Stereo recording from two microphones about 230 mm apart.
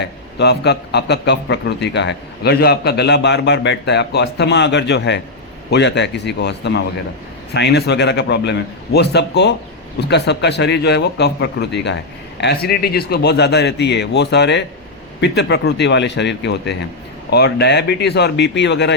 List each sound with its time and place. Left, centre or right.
0.3 s a man's voice: left